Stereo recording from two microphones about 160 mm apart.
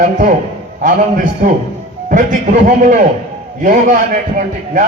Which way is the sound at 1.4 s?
60° right (ahead or behind).